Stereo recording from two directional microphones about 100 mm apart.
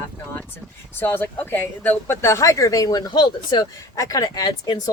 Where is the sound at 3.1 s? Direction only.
50° left (ahead or behind).